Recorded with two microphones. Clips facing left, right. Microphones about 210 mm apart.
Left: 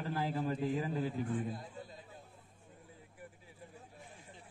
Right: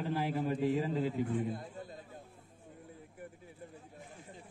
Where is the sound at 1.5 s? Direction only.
50° right (ahead or behind).